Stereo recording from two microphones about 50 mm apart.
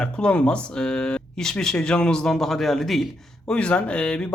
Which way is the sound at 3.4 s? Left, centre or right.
Left.